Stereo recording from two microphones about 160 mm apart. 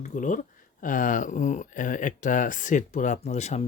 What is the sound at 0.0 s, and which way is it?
Speech, 55° left (ahead or behind).